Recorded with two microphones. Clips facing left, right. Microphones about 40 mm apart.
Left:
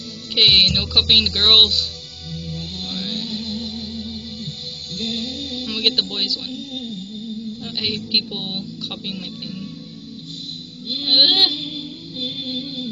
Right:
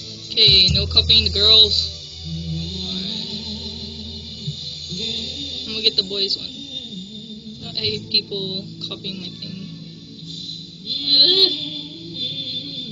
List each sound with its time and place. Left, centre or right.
0.4 s speech: centre
2.5 s music: left
5.6 s speech: left
8.1 s speech: centre
11.1 s speech: centre
11.5 s music: centre